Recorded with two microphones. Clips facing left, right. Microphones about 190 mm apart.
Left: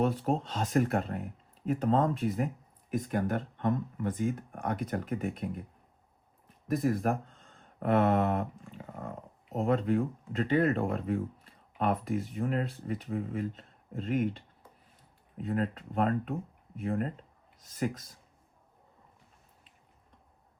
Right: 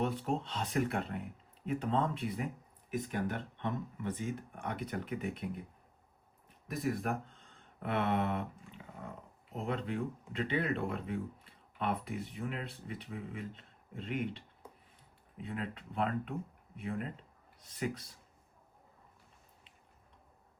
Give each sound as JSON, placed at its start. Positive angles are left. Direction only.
{"t": 0.0, "sound": "speech", "side_deg": 45}
{"t": 7.5, "sound": "a sound", "side_deg": 45}
{"t": 9.5, "sound": "speech", "side_deg": 45}